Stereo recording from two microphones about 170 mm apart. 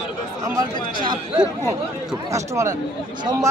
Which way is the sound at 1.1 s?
25° right (ahead or behind).